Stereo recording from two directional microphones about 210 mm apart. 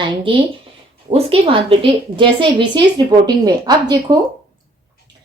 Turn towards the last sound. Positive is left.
turn(degrees=-20)  # may be behind; listen again after turning